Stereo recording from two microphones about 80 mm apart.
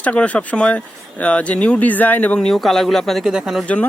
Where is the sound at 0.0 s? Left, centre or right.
Centre.